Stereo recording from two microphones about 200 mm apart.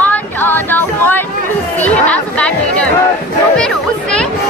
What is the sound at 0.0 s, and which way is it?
Music, 10° left (ahead or behind).